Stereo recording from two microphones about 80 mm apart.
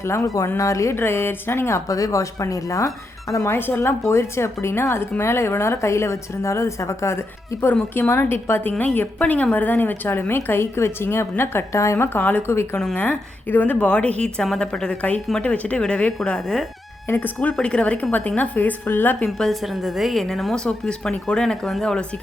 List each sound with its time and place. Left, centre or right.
0.0 s speech: left
3.5 s a woman's voice: left
12.1 s a woman's voice: left
12.7 s a woman's voice: centre
13.0 s a woman's voice: left
17.1 s a woman's voice: left
19.4 s a woman's voice: centre